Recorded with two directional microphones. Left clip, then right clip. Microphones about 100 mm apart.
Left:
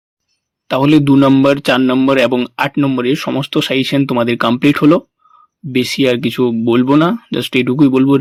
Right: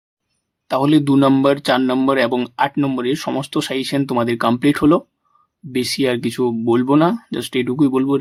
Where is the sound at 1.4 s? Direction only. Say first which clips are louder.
Left 4 dB; 30° left (ahead or behind).